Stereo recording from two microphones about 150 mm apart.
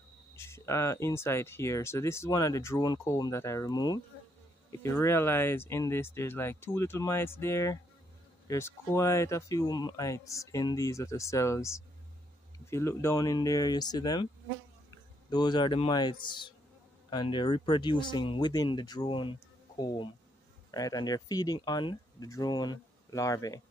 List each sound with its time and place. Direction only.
0.4 s speech: 20° left (ahead or behind)